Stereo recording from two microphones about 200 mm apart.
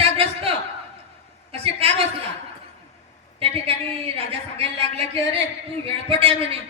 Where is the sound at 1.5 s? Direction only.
30° right (ahead or behind).